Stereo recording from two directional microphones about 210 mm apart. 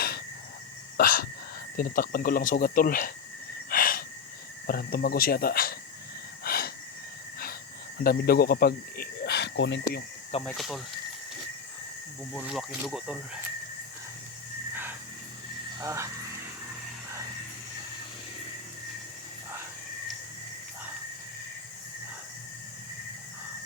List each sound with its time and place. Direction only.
0.9 s speech: 45° left (ahead or behind)
3.7 s gasp: 45° left (ahead or behind)
4.6 s speech: 45° left (ahead or behind)
6.4 s gasp: 45° left (ahead or behind)
8.0 s speech: 45° left (ahead or behind)
10.4 s speech: centre (ahead or behind)
12.3 s speech: centre (ahead or behind)
15.8 s speech: 15° right (ahead or behind)